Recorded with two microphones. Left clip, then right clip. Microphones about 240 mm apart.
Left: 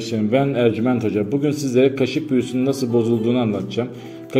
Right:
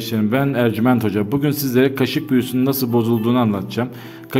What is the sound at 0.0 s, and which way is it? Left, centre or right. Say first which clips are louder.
A man's voice: left 1 dB; right.